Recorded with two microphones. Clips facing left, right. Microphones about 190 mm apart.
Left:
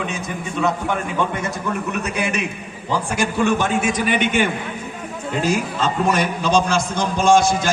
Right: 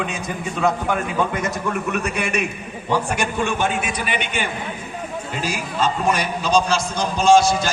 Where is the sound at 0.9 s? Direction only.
25° left (ahead or behind).